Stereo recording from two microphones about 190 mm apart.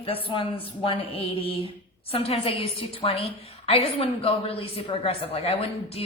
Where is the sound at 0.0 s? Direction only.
30° left (ahead or behind).